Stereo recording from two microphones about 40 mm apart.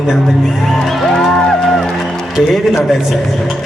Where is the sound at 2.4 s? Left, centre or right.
Centre.